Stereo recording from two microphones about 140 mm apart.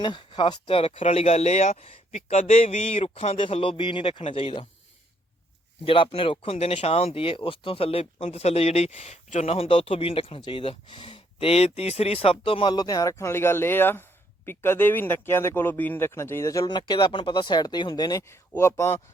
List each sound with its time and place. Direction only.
0.0 s speech: 35° left (ahead or behind)
5.8 s speech: 40° left (ahead or behind); by 19.0 s 20° left (ahead or behind)